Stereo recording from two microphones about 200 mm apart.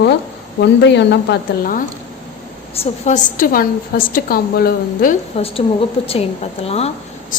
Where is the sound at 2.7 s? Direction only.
35° left (ahead or behind).